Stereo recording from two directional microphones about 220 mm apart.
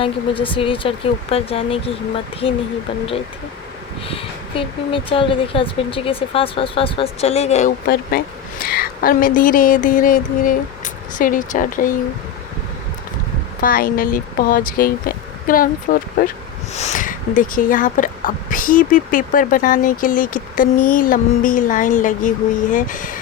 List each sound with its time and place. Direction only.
0.0 s speech: 25° left (ahead or behind)
4.1 s speech: 25° left (ahead or behind)
7.9 s a woman's voice: 40° left (ahead or behind)
13.6 s speech: 40° left (ahead or behind)